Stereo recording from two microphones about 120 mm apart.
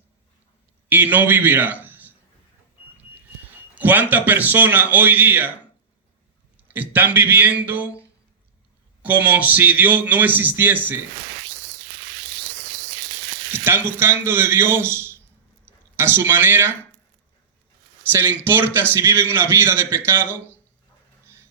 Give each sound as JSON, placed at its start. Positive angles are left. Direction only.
{"t": 0.9, "sound": "a man's voice", "side_deg": -15}
{"t": 3.8, "sound": "a man's voice", "side_deg": -15}
{"t": 6.6, "sound": "a man's voice", "side_deg": -15}
{"t": 9.0, "sound": "a man's voice", "side_deg": -15}
{"t": 13.5, "sound": "a man's voice", "side_deg": -20}
{"t": 18.1, "sound": "a man's voice", "side_deg": -20}